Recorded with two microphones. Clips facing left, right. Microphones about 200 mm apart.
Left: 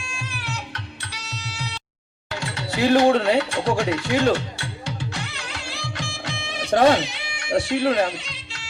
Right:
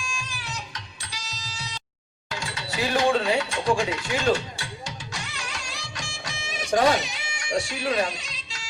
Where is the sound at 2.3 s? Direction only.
60° left (ahead or behind).